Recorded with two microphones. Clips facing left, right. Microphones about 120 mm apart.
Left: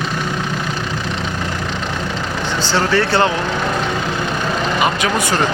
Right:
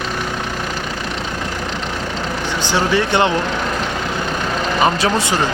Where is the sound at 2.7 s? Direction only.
15° right (ahead or behind).